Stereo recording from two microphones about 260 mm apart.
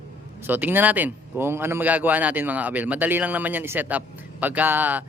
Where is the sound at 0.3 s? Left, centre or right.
Centre.